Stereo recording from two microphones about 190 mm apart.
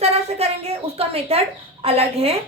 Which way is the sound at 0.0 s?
35° right (ahead or behind).